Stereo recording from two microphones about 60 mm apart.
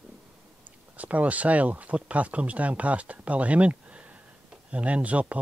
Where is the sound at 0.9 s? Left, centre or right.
Right.